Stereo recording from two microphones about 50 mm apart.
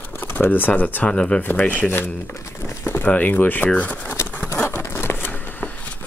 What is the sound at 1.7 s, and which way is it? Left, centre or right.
Speech, left.